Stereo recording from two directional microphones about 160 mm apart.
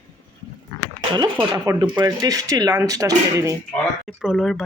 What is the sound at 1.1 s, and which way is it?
Speech, 25° right (ahead or behind).